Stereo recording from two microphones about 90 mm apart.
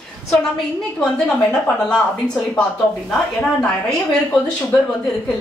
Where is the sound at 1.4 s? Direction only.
10° left (ahead or behind).